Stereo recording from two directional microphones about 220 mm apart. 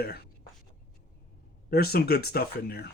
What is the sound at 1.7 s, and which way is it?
Speech, 45° left (ahead or behind).